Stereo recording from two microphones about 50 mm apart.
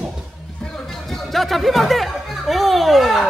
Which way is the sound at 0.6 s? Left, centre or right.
Centre.